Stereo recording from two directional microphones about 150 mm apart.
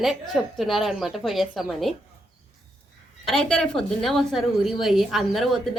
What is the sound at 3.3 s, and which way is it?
A woman's voice, 5° left (ahead or behind).